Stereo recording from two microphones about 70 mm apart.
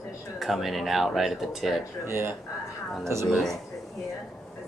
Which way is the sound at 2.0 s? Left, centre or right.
Right.